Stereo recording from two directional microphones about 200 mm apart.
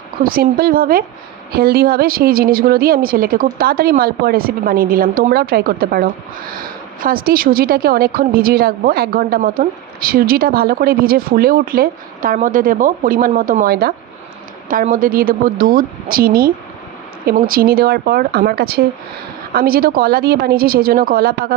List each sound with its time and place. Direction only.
0.2 s a woman's voice: 45° right (ahead or behind)